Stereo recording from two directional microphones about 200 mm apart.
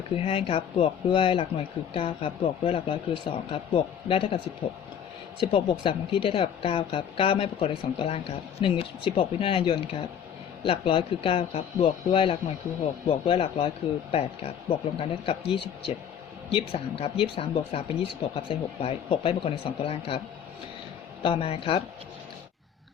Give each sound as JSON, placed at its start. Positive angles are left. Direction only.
{"t": 0.3, "sound": "speech", "side_deg": 30}
{"t": 5.4, "sound": "speech", "side_deg": 25}
{"t": 14.7, "sound": "speech", "side_deg": 25}
{"t": 21.2, "sound": "speech", "side_deg": 25}